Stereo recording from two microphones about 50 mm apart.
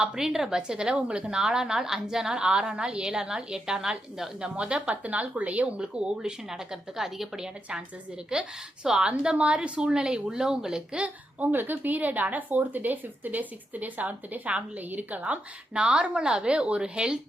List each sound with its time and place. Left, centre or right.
0.0 s a woman's voice: centre
11.5 s speech: right
15.2 s a woman's voice: right